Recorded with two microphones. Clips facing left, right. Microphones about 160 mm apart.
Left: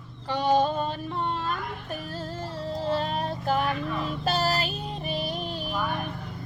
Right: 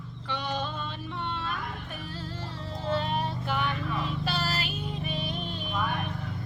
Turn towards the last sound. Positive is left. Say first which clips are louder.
# left 3 dB
turn(degrees=35)  # may be behind; listen again after turning